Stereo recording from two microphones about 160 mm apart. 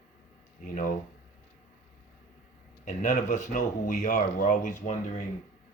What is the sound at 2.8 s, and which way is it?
Speech, 55° left (ahead or behind).